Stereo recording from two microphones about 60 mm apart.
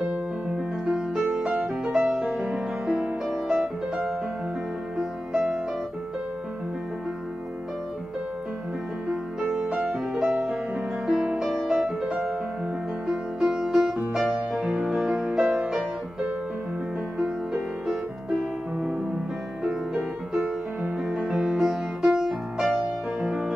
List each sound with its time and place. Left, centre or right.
0.8 s music: centre
1.9 s music: centre
3.3 s music: centre
4.9 s music: centre
9.4 s music: centre
17.2 s music: centre